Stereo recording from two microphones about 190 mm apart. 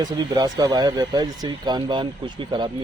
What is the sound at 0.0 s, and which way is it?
Speech, 20° right (ahead or behind).